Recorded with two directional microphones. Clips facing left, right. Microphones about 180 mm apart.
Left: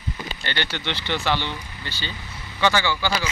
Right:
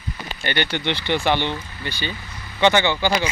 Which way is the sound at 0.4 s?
15° right (ahead or behind).